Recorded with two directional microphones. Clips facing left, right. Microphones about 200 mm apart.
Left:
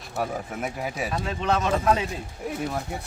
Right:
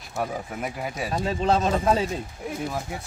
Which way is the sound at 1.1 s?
30° right (ahead or behind).